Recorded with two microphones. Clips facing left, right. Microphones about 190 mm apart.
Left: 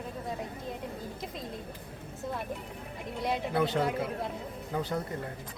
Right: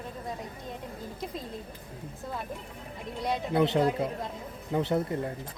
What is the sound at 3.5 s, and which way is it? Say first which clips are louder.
Speech: right 5 dB; 20° right (ahead or behind).